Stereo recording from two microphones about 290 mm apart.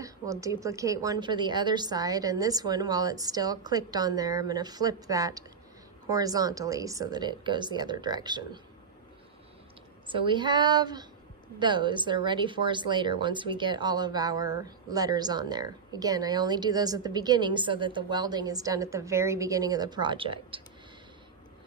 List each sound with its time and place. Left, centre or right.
0.0 s speech: centre
10.0 s speech: centre